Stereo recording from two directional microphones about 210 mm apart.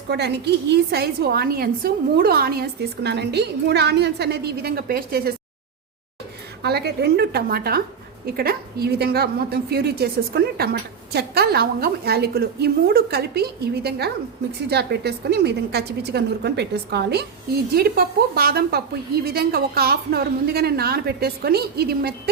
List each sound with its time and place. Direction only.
0.1 s a woman's voice: 50° right (ahead or behind)
6.6 s a woman's voice: 50° right (ahead or behind)